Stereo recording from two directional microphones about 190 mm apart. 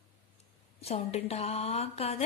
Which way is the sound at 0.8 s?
35° left (ahead or behind).